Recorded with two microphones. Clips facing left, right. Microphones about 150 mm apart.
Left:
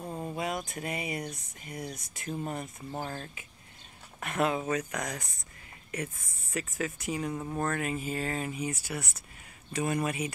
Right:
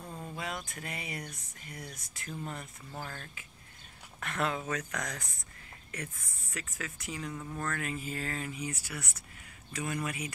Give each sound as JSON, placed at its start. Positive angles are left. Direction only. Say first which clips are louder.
{"t": 0.0, "sound": "a sound", "louder": "left 6 dB", "side_deg": 25}
{"t": 0.7, "sound": "speech", "louder": "left 7 dB", "side_deg": 20}
{"t": 4.2, "sound": "speech", "louder": "left 5 dB", "side_deg": 15}
{"t": 6.5, "sound": "speech", "louder": "left 8 dB", "side_deg": 20}